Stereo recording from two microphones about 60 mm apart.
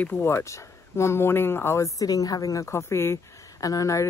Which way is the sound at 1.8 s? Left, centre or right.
Left.